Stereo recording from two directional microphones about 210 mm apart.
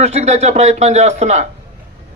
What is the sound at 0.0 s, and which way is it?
A man's voice, 30° right (ahead or behind).